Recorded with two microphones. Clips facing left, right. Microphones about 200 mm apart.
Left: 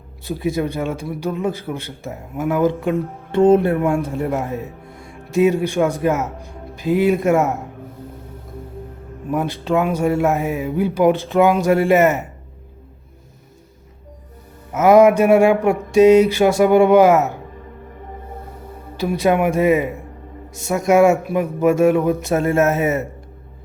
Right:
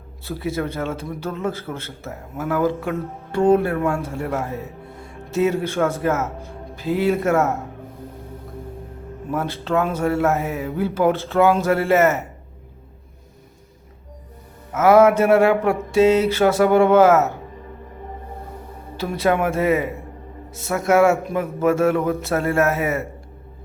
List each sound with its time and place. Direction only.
0.3 s a man's voice: 15° left (ahead or behind)
9.3 s a man's voice: 15° left (ahead or behind)
14.7 s a man's voice: 15° left (ahead or behind)
18.9 s a man's voice: 15° left (ahead or behind)